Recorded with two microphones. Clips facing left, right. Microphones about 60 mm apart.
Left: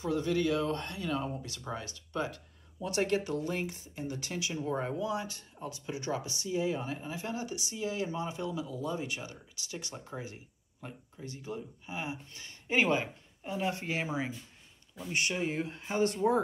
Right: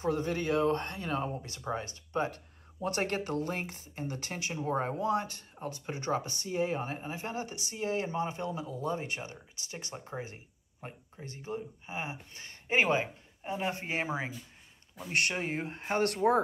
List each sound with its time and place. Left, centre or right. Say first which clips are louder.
0.0 s speech: left 1 dB; right
15.3 s speech: left 1 dB; right
15.9 s speech: right 1 dB; right